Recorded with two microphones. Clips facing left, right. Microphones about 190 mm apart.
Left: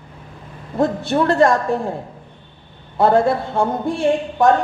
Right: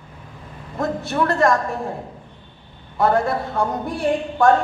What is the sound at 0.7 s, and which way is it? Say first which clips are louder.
Speech: left 5 dB; 30° left (ahead or behind).